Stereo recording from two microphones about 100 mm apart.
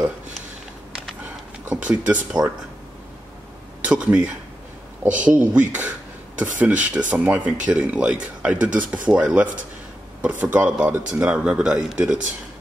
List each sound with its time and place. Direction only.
1.6 s speech: 15° right (ahead or behind)
3.8 s speech: 10° right (ahead or behind)